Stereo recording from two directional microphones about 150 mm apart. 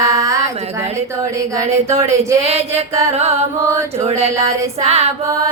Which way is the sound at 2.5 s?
45° right (ahead or behind).